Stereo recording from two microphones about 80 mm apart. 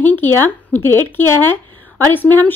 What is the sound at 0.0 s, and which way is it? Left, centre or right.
A woman's voice, left.